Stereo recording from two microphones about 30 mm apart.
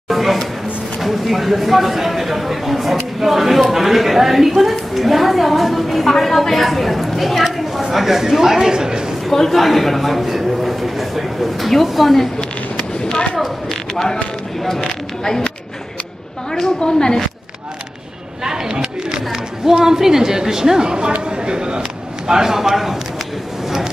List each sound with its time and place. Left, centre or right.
0.1 s a sound: centre
0.9 s a woman's voice: centre
8.2 s a woman's voice: centre
9.3 s a woman's voice: centre
13.4 s speech: centre
16.8 s a woman's voice: left
18.4 s a woman's voice: centre
22.3 s a man's voice: centre